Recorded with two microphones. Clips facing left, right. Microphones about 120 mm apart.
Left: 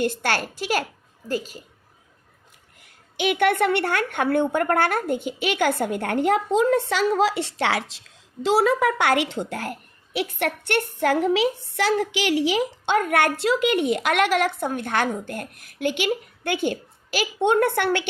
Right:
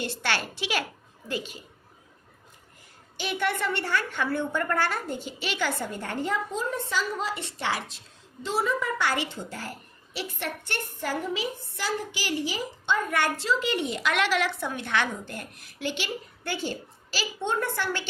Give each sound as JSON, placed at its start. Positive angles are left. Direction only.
{"t": 0.0, "sound": "a woman's voice", "side_deg": 45}
{"t": 3.2, "sound": "a woman's voice", "side_deg": 60}